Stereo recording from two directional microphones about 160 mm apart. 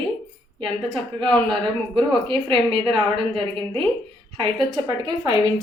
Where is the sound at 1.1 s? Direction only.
30° right (ahead or behind).